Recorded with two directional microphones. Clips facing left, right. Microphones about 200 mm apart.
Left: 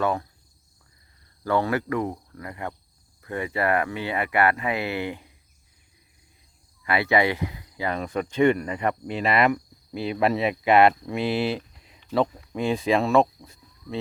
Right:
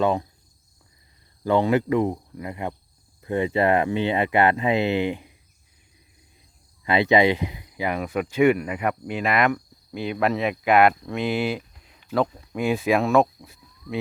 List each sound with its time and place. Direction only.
0.0 s speech: 20° right (ahead or behind)
1.5 s speech: 20° right (ahead or behind)
6.8 s speech: 20° right (ahead or behind); by 14.0 s 5° right (ahead or behind)